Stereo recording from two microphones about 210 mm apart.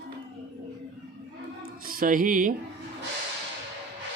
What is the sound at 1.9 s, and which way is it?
Music, 40° right (ahead or behind).